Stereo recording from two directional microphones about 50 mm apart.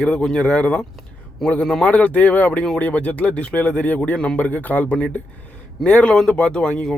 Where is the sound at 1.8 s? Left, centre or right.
Left.